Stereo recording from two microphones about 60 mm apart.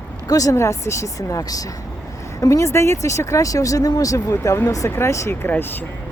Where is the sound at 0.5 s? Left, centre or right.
Left.